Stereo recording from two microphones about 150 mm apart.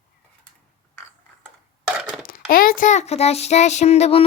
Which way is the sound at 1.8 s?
5° right (ahead or behind).